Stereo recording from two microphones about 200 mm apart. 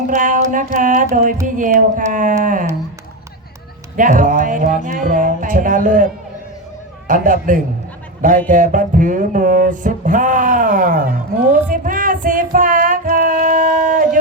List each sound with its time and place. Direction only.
0.1 s music: 40° right (ahead or behind)
3.9 s music: 40° right (ahead or behind)
7.1 s music: 40° right (ahead or behind)